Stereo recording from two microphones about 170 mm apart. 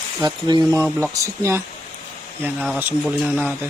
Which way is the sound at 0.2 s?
25° right (ahead or behind).